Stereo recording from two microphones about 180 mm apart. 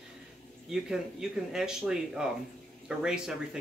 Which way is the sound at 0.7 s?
5° right (ahead or behind).